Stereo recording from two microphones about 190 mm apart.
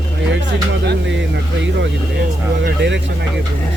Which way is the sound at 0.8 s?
70° right (ahead or behind).